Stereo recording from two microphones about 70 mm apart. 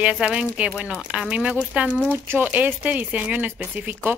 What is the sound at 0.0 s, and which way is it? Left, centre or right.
Speech, centre.